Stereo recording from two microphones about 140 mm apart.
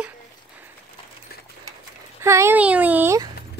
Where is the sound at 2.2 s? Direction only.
20° right (ahead or behind).